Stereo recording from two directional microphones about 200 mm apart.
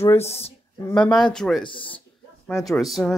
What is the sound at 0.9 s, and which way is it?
Speech, 5° left (ahead or behind).